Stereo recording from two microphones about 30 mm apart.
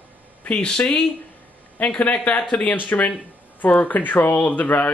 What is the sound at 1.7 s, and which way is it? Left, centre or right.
A man's voice, left.